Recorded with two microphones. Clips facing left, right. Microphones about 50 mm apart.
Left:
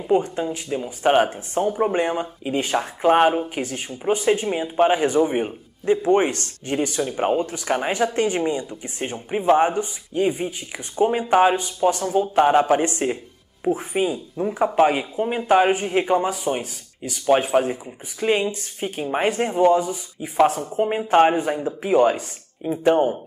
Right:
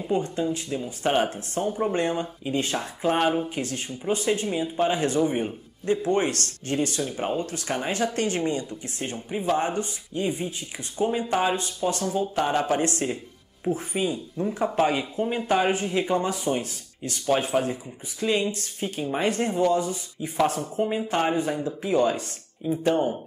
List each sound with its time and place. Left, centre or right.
0.0 s speech: left